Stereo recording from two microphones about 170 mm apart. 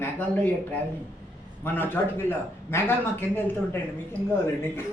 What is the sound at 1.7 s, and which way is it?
Speech, 10° left (ahead or behind).